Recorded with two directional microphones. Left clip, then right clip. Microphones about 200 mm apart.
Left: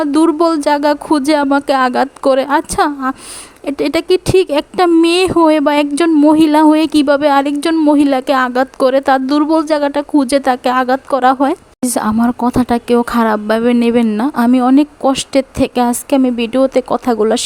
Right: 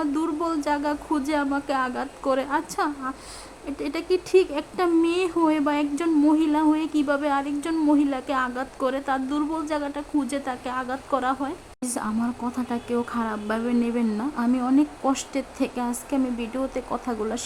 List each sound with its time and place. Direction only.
0.0 s a woman's voice: 40° left (ahead or behind)